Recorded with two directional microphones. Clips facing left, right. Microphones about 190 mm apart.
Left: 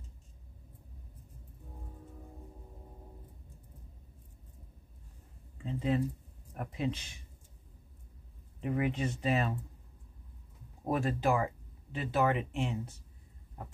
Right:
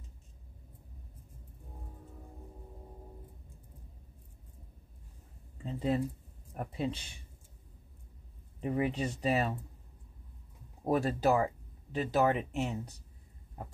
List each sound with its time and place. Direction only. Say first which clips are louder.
5.6 s speech: even; 35° right (ahead or behind)
8.5 s speech: right 1 dB; 35° right (ahead or behind)
10.9 s speech: right 2 dB; 35° right (ahead or behind)